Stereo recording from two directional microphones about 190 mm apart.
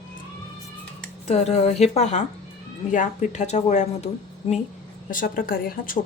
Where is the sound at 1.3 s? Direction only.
35° left (ahead or behind).